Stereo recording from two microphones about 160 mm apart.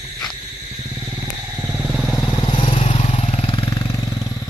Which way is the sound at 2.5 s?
35° left (ahead or behind).